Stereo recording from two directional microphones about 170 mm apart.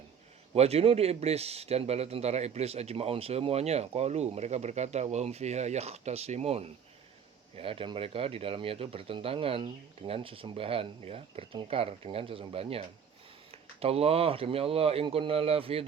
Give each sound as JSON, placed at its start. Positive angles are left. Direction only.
{"t": 0.5, "sound": "speech", "side_deg": -35}